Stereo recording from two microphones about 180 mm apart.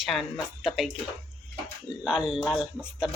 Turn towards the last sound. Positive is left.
turn(degrees=0)  # may be behind; listen again after turning